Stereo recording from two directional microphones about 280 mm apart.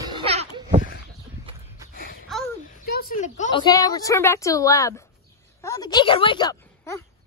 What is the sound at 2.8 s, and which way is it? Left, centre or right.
A woman's voice, left.